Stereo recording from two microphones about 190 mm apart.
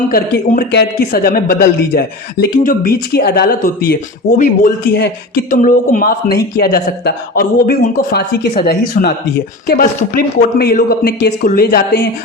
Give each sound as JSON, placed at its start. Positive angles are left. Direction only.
{"t": 0.1, "sound": "speech", "side_deg": 55}